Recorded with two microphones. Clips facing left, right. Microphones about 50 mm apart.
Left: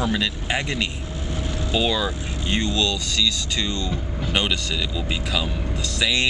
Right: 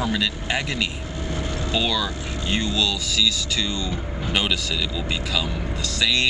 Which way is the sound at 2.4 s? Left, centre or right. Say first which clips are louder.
Left 1 dB; centre.